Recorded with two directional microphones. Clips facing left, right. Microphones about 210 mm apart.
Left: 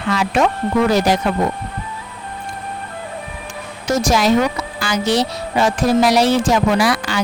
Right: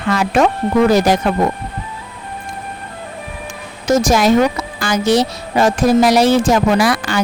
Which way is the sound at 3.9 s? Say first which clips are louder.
Right 3 dB; 50° right (ahead or behind).